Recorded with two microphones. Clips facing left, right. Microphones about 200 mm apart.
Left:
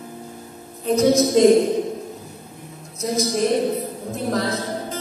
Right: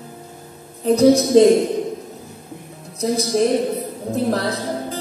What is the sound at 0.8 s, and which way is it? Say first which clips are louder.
Music: right 3 dB; 35° right (ahead or behind).